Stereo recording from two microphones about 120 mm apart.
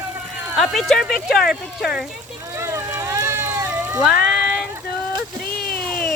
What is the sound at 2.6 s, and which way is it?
Boat, 20° right (ahead or behind).